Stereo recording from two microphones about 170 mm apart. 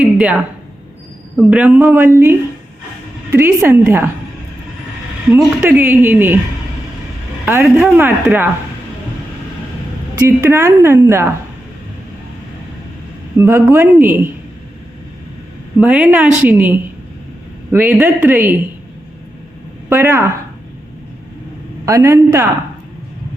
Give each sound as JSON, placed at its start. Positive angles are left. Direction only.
{"t": 0.0, "sound": "a sound", "side_deg": -5}
{"t": 1.4, "sound": "a woman's voice", "side_deg": -10}
{"t": 3.3, "sound": "a woman's voice", "side_deg": -15}
{"t": 5.3, "sound": "a woman's voice", "side_deg": -15}
{"t": 7.6, "sound": "speech", "side_deg": 0}
{"t": 8.0, "sound": "a woman's voice", "side_deg": -10}
{"t": 10.2, "sound": "a woman's voice", "side_deg": -15}
{"t": 13.4, "sound": "a woman's voice", "side_deg": -15}
{"t": 15.8, "sound": "a woman's voice", "side_deg": -10}
{"t": 19.9, "sound": "a woman's voice", "side_deg": -15}
{"t": 21.8, "sound": "a woman's voice", "side_deg": -15}